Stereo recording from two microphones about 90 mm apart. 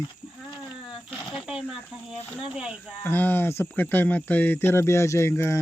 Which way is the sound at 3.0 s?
20° left (ahead or behind).